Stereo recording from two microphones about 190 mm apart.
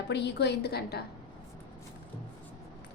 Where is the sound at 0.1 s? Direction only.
65° left (ahead or behind).